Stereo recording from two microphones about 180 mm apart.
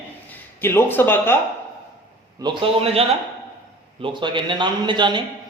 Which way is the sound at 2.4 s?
30° right (ahead or behind).